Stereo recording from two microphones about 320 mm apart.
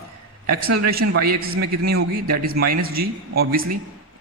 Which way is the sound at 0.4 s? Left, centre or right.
Right.